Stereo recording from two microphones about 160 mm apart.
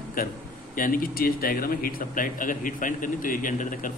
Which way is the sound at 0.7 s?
60° left (ahead or behind).